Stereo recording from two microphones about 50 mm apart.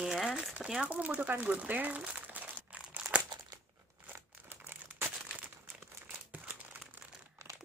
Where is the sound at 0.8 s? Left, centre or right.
Right.